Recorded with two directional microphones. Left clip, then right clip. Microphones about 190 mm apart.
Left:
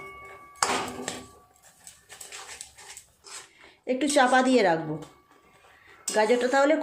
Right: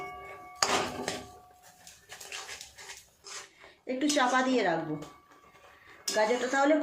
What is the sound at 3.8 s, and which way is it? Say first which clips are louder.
Speech: left 6 dB; 45° left (ahead or behind).